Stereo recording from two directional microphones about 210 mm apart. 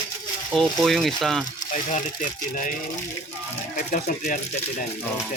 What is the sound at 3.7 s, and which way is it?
Speech, 35° left (ahead or behind).